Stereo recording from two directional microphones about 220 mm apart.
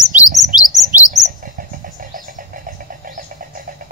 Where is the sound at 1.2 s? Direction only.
40° right (ahead or behind).